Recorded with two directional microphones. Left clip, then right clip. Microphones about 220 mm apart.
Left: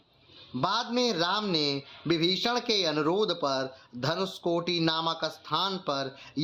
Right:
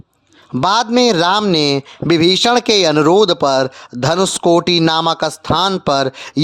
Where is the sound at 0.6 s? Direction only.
50° right (ahead or behind).